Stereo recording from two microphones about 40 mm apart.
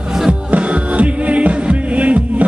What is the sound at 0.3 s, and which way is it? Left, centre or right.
Music, right.